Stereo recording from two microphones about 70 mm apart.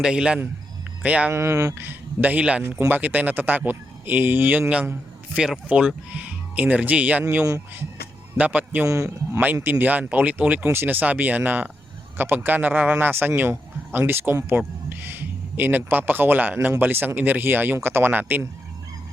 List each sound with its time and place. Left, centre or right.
0.0 s a man's voice: centre
1.3 s speech: right
1.8 s a man's voice: right
5.3 s a man's voice: centre